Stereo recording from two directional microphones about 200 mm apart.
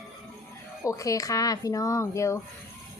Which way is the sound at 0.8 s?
15° left (ahead or behind).